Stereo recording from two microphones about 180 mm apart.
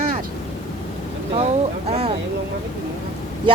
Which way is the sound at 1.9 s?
35° right (ahead or behind).